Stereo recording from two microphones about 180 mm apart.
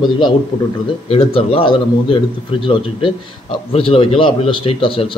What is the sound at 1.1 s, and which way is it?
Speech, 30° left (ahead or behind).